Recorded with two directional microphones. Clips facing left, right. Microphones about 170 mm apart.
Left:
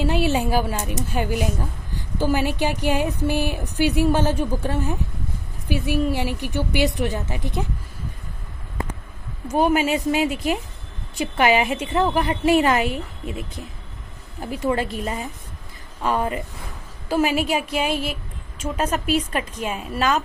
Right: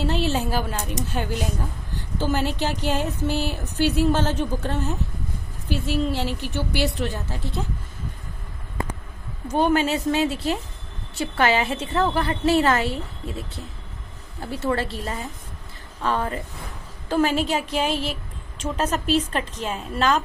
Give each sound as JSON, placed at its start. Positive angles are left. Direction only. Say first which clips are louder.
{"t": 0.0, "sound": "a woman's voice", "louder": "left 3 dB", "side_deg": 15}
{"t": 9.5, "sound": "a woman's voice", "louder": "left 1 dB", "side_deg": 10}